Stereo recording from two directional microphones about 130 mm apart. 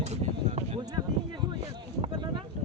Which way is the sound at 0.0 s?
60° right (ahead or behind).